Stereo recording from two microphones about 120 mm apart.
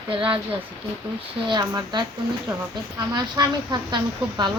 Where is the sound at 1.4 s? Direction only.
35° right (ahead or behind).